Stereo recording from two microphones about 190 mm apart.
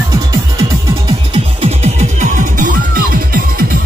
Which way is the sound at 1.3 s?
30° right (ahead or behind).